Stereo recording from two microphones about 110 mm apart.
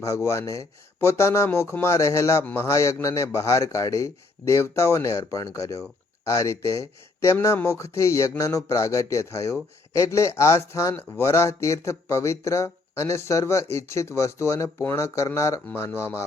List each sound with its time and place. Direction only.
0.0 s speech: 25° left (ahead or behind)